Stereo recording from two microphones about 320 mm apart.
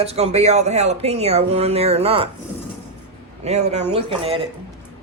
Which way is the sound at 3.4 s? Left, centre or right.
Centre.